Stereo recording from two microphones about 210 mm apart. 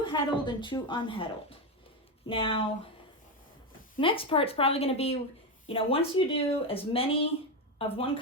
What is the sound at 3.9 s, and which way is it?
Speech, 25° left (ahead or behind).